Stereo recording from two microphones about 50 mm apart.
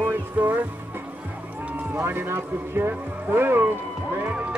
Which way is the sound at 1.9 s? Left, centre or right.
Right.